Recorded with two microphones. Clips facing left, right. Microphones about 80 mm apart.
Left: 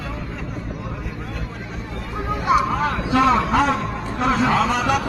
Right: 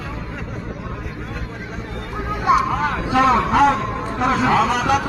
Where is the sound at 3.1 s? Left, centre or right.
Centre.